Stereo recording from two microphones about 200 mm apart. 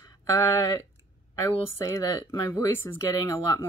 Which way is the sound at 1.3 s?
15° left (ahead or behind).